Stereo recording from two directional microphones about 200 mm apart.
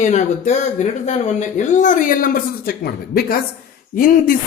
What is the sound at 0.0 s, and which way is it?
Speech, 35° left (ahead or behind).